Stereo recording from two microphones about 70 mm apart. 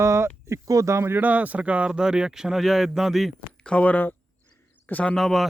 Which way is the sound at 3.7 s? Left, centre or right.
Centre.